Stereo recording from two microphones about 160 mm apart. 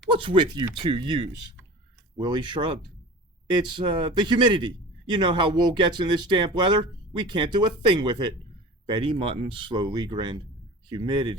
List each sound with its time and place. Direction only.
0.1 s a man's voice: 30° right (ahead or behind)